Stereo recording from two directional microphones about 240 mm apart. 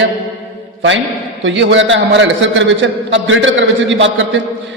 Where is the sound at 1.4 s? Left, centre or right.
Right.